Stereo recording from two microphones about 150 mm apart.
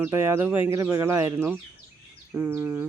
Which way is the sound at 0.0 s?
15° right (ahead or behind).